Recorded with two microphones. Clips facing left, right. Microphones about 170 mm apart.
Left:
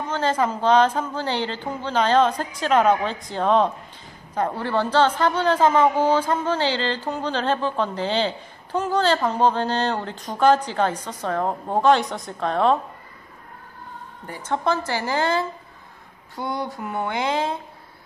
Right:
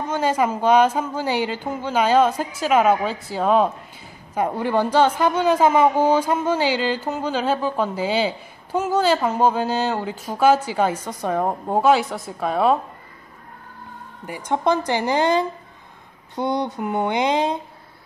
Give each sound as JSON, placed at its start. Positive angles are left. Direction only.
{"t": 0.1, "sound": "speech", "side_deg": -10}
{"t": 14.2, "sound": "speech", "side_deg": -10}